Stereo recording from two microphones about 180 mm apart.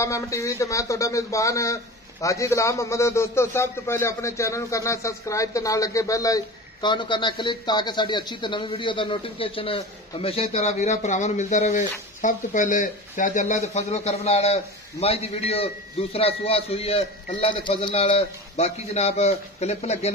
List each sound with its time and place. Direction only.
0.0 s a man's voice: 15° left (ahead or behind); by 20.1 s 40° left (ahead or behind)